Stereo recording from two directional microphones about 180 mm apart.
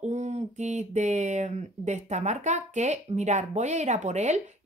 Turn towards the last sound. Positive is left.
turn(degrees=-40)  # may be behind; listen again after turning